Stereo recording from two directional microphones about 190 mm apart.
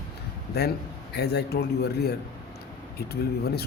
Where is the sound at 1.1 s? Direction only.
60° left (ahead or behind).